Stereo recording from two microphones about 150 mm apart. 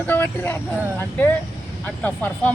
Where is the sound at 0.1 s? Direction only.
10° left (ahead or behind).